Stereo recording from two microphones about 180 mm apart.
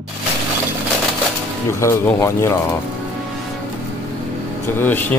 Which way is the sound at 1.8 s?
15° left (ahead or behind).